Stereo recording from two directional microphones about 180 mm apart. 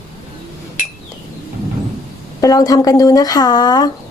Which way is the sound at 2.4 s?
20° left (ahead or behind).